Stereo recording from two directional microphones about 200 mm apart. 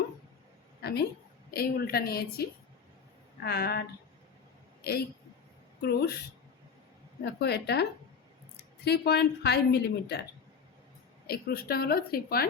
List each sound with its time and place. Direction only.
0.8 s a sound: 55° left (ahead or behind)
1.5 s a woman's voice: 50° left (ahead or behind)
7.3 s speech: 55° left (ahead or behind)
11.3 s a woman's voice: 50° left (ahead or behind)